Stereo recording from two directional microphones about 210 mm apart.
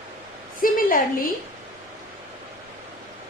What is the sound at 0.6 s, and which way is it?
Speech, 40° left (ahead or behind).